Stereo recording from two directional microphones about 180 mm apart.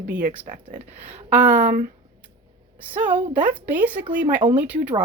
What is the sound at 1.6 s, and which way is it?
Speech, 45° right (ahead or behind).